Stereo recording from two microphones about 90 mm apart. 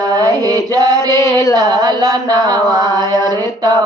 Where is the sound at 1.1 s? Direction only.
35° left (ahead or behind).